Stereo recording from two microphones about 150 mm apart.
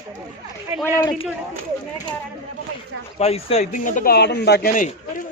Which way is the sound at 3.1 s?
45° left (ahead or behind).